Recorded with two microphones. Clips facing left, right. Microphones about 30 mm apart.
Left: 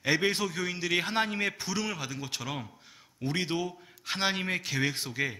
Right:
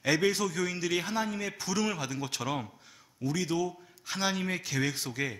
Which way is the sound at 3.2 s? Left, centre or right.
Left.